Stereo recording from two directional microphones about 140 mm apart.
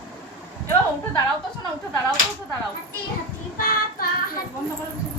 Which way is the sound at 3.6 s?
90° left.